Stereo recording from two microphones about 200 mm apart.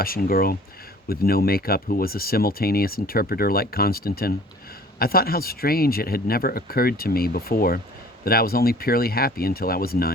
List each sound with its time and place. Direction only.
0.0 s speech: 45° left (ahead or behind)